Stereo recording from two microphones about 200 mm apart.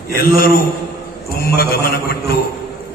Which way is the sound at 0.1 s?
50° left (ahead or behind).